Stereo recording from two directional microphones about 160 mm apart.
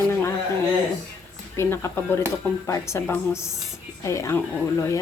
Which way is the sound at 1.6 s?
15° left (ahead or behind).